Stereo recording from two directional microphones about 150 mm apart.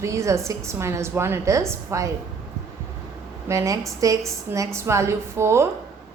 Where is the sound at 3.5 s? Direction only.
20° right (ahead or behind).